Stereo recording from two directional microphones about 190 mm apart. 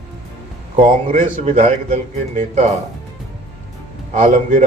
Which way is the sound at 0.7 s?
40° right (ahead or behind).